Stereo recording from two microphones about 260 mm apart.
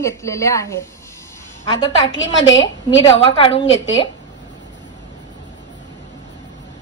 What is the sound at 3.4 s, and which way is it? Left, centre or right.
Speech, left.